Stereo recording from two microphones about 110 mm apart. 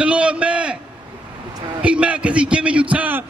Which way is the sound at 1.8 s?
10° right (ahead or behind).